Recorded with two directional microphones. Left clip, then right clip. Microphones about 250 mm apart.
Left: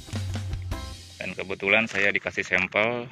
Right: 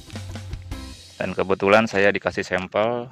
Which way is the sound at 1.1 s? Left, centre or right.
Right.